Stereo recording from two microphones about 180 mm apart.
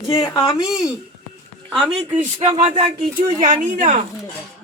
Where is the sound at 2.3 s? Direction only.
30° right (ahead or behind).